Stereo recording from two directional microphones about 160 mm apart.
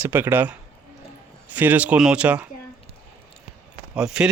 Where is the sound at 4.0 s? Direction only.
5° right (ahead or behind).